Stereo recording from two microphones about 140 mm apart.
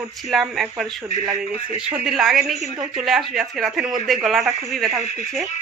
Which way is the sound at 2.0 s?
5° right (ahead or behind).